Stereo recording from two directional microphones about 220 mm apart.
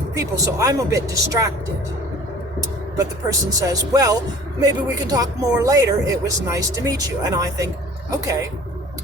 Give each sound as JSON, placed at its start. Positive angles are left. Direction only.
{"t": 0.2, "sound": "speech", "side_deg": -15}
{"t": 3.2, "sound": "speech", "side_deg": -15}